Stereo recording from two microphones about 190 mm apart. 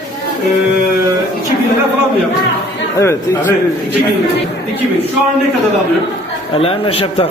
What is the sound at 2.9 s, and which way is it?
Speech, 15° left (ahead or behind).